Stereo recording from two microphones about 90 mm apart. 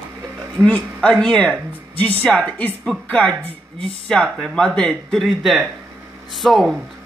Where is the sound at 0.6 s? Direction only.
10° left (ahead or behind).